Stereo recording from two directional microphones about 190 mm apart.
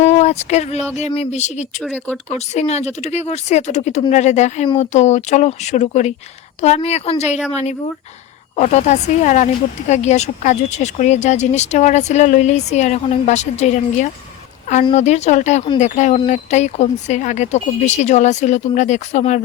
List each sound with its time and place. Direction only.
0.0 s a sound: 35° left (ahead or behind)
0.9 s speech: 35° left (ahead or behind)
1.8 s speech: 10° left (ahead or behind)
2.3 s speech: 35° left (ahead or behind)